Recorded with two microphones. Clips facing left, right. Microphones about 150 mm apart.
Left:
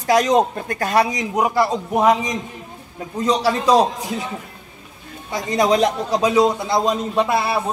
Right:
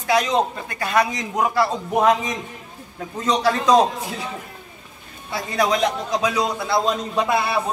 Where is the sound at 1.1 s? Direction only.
15° left (ahead or behind).